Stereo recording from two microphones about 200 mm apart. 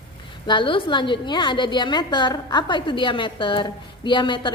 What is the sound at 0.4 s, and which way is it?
A woman's voice, 25° left (ahead or behind).